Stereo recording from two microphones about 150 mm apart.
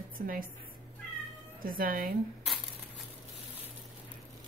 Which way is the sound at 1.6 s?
70° right (ahead or behind).